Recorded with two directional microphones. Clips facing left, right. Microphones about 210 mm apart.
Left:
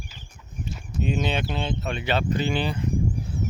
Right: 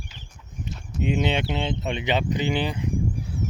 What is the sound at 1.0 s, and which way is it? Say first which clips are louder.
Speech: right 2 dB; 20° right (ahead or behind).